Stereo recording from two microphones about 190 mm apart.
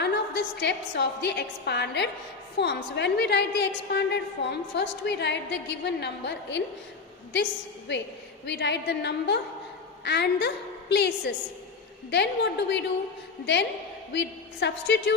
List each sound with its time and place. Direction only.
0.0 s a woman's voice: 60° left (ahead or behind)
8.4 s a woman's voice: 65° left (ahead or behind)
12.1 s a woman's voice: 65° left (ahead or behind)